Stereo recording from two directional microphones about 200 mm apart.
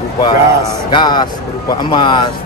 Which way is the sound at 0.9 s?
20° left (ahead or behind).